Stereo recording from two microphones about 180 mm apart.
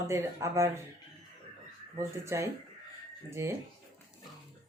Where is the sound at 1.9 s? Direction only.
15° right (ahead or behind).